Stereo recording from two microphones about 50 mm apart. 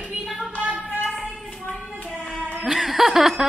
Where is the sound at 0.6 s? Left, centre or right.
Right.